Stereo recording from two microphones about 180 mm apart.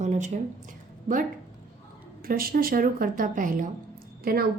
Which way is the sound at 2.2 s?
55° right (ahead or behind).